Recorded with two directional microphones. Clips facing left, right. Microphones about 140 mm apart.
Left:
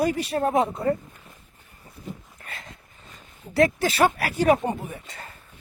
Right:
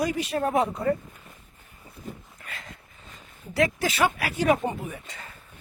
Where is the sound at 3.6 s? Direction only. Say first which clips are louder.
Left 4 dB; 35° left (ahead or behind).